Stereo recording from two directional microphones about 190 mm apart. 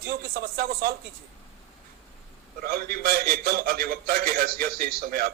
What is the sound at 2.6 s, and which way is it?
A man's voice, 55° right (ahead or behind).